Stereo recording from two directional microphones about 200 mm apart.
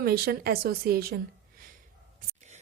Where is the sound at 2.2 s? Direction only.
35° right (ahead or behind).